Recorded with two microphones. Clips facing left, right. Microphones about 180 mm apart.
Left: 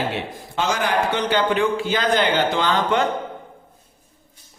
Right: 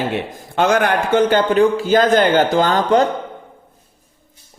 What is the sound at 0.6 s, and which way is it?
A man's voice, 55° right (ahead or behind).